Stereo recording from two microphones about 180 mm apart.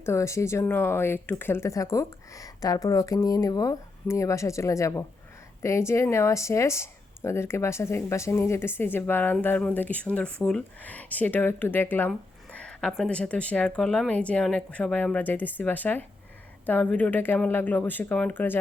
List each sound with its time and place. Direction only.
0.0 s speech: 15° left (ahead or behind)